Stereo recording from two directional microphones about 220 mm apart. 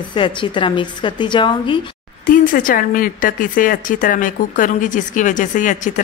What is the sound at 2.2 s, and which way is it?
Speech, 40° left (ahead or behind).